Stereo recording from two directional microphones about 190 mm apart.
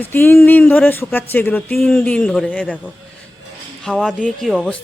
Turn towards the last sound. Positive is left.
turn(degrees=5)  # may be behind; listen again after turning